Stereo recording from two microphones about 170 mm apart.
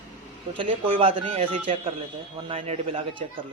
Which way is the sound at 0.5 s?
35° right (ahead or behind).